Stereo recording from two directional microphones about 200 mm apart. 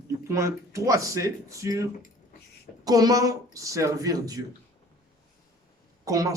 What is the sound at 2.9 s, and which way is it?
Speech, 20° right (ahead or behind).